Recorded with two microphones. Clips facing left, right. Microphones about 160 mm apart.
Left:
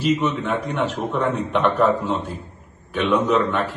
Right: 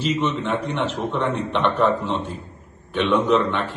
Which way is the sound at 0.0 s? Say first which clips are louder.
Left 2 dB; 5° left (ahead or behind).